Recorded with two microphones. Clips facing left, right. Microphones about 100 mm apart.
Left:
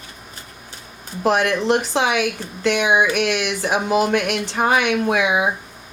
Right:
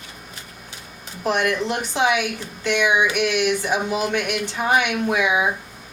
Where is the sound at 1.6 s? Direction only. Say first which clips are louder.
Left 3 dB; 65° left (ahead or behind).